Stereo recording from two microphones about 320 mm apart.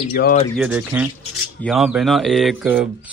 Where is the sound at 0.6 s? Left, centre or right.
Centre.